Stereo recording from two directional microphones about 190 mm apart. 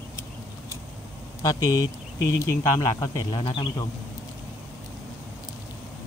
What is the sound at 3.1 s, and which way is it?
Speech, 25° left (ahead or behind).